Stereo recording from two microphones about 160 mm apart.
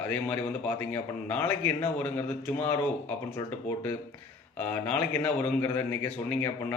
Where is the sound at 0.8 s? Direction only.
10° left (ahead or behind).